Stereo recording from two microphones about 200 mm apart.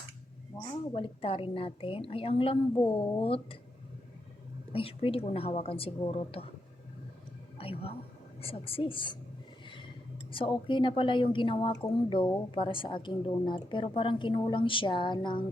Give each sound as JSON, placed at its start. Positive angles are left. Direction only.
{"t": 0.5, "sound": "a sound", "side_deg": 15}
{"t": 0.9, "sound": "a woman's voice", "side_deg": 25}
{"t": 2.7, "sound": "speech", "side_deg": 10}
{"t": 3.2, "sound": "a woman's voice", "side_deg": 30}
{"t": 4.7, "sound": "a woman's voice", "side_deg": 30}
{"t": 7.6, "sound": "music", "side_deg": 30}
{"t": 8.4, "sound": "a woman's voice", "side_deg": 30}
{"t": 10.3, "sound": "a woman's voice", "side_deg": 25}